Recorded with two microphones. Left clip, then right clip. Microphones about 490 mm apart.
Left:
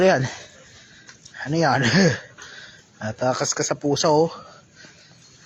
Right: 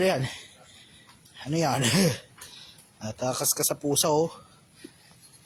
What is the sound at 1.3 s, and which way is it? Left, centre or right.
Speech, right.